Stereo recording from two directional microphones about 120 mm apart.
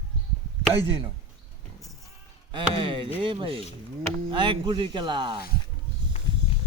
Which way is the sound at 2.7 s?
45° right (ahead or behind).